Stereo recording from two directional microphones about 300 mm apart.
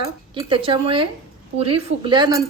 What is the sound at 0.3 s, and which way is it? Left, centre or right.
A woman's voice, centre.